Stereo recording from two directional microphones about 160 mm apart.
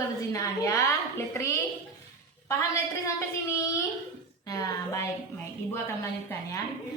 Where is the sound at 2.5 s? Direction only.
15° left (ahead or behind).